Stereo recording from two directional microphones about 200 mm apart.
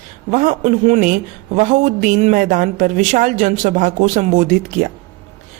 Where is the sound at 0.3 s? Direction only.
40° right (ahead or behind).